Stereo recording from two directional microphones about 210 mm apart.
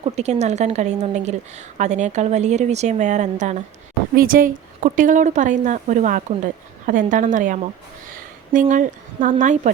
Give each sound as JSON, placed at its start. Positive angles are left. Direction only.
{"t": 0.0, "sound": "speech", "side_deg": -30}